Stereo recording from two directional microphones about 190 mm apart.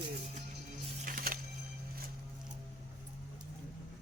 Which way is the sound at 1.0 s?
45° right (ahead or behind).